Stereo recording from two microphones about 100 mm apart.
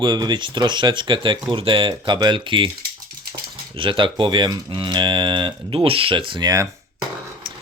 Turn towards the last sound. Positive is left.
turn(degrees=-55)  # may be behind; listen again after turning